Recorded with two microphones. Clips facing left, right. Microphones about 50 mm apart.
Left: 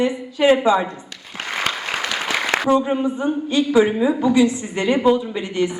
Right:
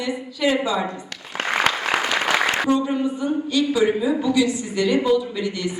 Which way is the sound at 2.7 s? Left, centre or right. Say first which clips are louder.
Left 3 dB; left.